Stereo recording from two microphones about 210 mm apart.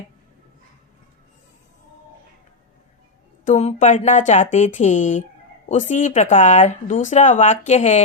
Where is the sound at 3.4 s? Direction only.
35° left (ahead or behind).